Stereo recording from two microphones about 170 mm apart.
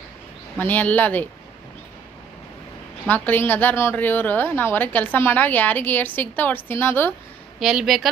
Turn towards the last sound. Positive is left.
turn(degrees=0)  # may be behind; listen again after turning